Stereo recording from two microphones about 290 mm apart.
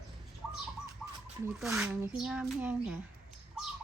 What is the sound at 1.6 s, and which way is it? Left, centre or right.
A child's voice, centre.